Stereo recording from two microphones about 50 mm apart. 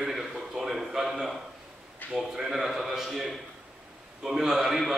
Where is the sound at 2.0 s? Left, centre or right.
Left.